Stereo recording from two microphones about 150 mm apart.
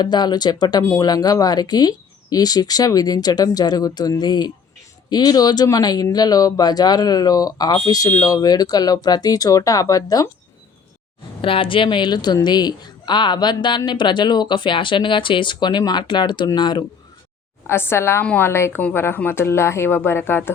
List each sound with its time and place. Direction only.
0.0 s speech: 30° left (ahead or behind)
11.4 s speech: 35° left (ahead or behind)
17.7 s a woman's voice: 15° left (ahead or behind)